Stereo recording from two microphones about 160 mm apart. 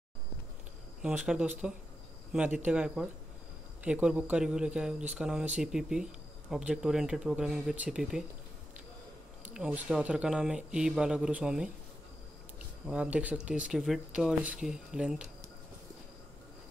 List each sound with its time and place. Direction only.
1.0 s speech: 5° right (ahead or behind)
9.4 s speech: 10° right (ahead or behind)
12.8 s speech: 5° right (ahead or behind)